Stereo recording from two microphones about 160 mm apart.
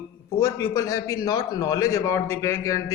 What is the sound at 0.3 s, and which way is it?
A man's voice, 15° left (ahead or behind).